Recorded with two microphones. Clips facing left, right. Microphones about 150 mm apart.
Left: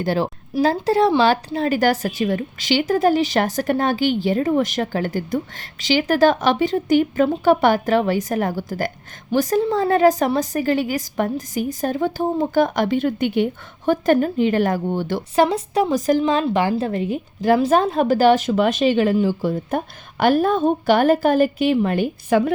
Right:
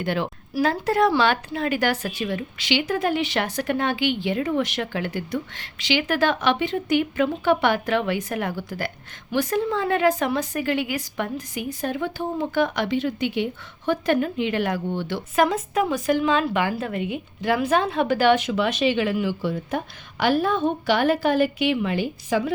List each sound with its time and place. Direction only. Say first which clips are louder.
0.0 s a woman's voice: left 4 dB; 35° left (ahead or behind)
15.4 s a woman's voice: left 3 dB; 30° left (ahead or behind); by 22.5 s 60° left (ahead or behind)